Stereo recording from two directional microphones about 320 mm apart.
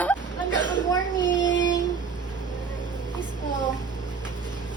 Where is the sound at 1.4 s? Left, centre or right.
Left.